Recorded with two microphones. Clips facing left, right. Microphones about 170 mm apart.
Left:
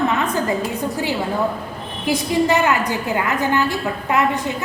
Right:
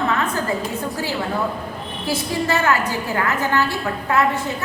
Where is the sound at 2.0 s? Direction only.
15° left (ahead or behind).